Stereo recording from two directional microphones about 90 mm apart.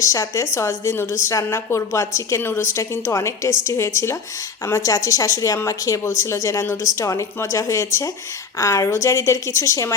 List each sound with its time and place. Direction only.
0.0 s a woman's voice: 35° left (ahead or behind)